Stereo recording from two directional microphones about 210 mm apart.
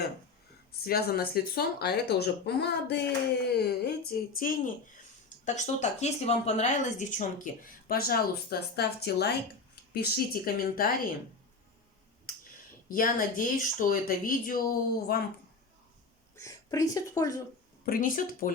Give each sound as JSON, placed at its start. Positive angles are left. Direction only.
{"t": 0.9, "sound": "a woman's voice", "side_deg": 45}
{"t": 12.9, "sound": "a woman's voice", "side_deg": 40}
{"t": 16.3, "sound": "speech", "side_deg": 15}
{"t": 17.8, "sound": "speech", "side_deg": 40}